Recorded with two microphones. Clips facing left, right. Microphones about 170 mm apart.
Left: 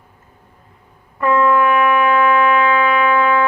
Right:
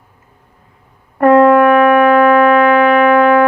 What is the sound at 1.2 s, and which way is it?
Music, 60° right (ahead or behind).